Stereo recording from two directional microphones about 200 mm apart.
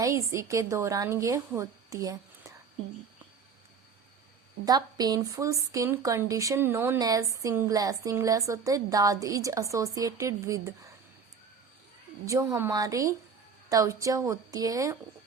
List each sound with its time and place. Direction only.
0.0 s a woman's voice: 15° right (ahead or behind)
4.6 s a woman's voice: 20° right (ahead or behind)
12.2 s a woman's voice: 15° right (ahead or behind)